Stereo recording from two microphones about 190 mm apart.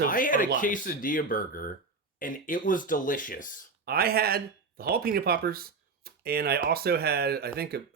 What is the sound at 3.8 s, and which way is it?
Speech, 55° right (ahead or behind).